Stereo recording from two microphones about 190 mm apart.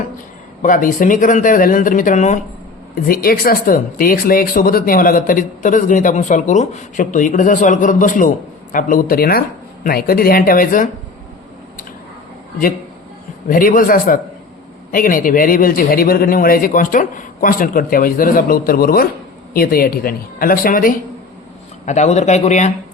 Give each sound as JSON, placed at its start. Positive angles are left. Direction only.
{"t": 0.6, "sound": "speech", "side_deg": 45}
{"t": 2.9, "sound": "speech", "side_deg": 50}
{"t": 13.5, "sound": "speech", "side_deg": 45}